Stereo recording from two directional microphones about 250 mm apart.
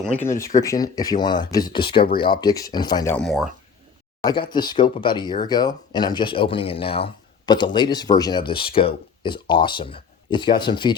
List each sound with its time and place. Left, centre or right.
0.0 s speech: centre
4.2 s speech: centre